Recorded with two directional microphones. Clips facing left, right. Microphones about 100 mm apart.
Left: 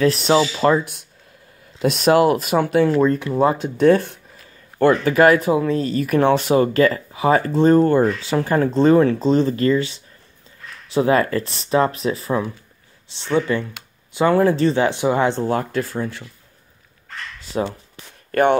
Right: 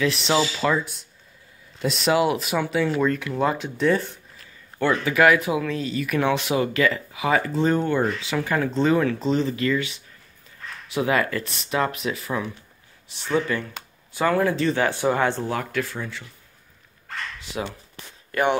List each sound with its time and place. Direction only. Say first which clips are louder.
0.0 s speech: left 6 dB; 40° left (ahead or behind)
1.9 s speech: left 6 dB; 50° left (ahead or behind)
3.0 s speech: left 6 dB; 35° left (ahead or behind); by 4.2 s 55° left (ahead or behind)
4.7 s speech: left 6 dB; 45° left (ahead or behind)
14.8 s speech: left 4 dB; 20° left (ahead or behind)
15.4 s speech: left 5 dB; 35° left (ahead or behind)
17.5 s speech: left 8 dB; 40° left (ahead or behind)
18.3 s speech: left 6 dB; 50° left (ahead or behind)